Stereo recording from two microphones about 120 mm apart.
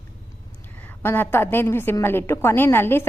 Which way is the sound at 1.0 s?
15° left (ahead or behind).